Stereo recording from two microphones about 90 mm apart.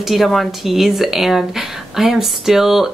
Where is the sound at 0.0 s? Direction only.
Centre (ahead or behind).